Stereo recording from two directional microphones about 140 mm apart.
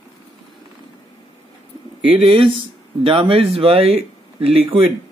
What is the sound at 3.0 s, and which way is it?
Speech, 40° right (ahead or behind).